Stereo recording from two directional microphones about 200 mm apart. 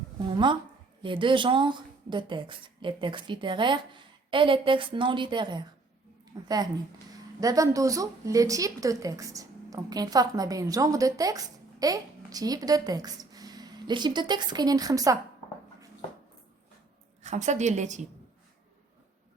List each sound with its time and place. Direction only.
0.2 s a woman's voice: 25° right (ahead or behind)
17.2 s a woman's voice: 35° right (ahead or behind)